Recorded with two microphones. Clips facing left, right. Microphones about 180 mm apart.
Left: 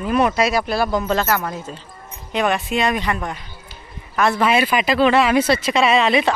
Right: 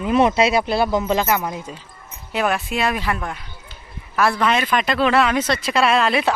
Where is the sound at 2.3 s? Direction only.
Centre (ahead or behind).